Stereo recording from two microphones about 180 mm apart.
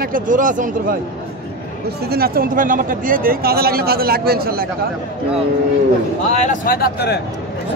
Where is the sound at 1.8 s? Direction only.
60° right (ahead or behind).